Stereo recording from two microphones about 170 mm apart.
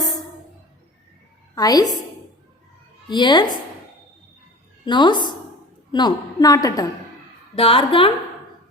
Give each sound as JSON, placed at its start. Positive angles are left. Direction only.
{"t": 1.5, "sound": "a woman's voice", "side_deg": 20}
{"t": 3.1, "sound": "a woman's voice", "side_deg": 25}
{"t": 4.9, "sound": "a woman's voice", "side_deg": 25}
{"t": 7.5, "sound": "a woman's voice", "side_deg": 35}